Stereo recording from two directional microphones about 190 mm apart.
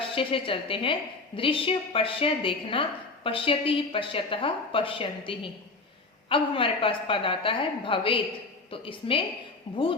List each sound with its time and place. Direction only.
0.0 s a woman's voice: 30° left (ahead or behind)